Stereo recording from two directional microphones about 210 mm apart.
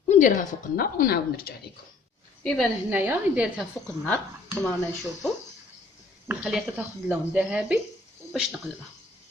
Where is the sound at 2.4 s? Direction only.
5° left (ahead or behind).